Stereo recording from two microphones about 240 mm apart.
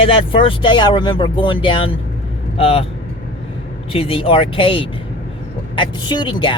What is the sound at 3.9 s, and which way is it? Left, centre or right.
Speech, left.